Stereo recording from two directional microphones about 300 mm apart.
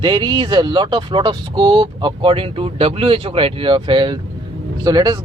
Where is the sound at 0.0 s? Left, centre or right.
Centre.